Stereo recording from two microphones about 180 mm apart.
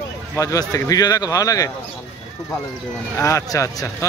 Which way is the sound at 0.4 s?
20° left (ahead or behind).